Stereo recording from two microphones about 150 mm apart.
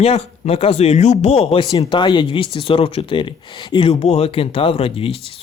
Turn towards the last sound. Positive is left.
turn(degrees=40)  # may be behind; listen again after turning